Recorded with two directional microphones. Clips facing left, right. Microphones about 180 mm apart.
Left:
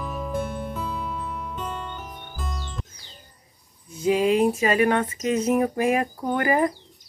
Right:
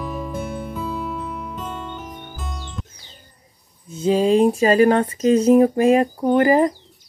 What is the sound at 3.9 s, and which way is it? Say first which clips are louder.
Speech: right 4 dB; 25° right (ahead or behind).